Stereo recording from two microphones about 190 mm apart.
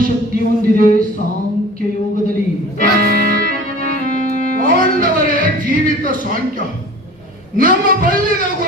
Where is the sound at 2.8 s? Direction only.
50° right (ahead or behind).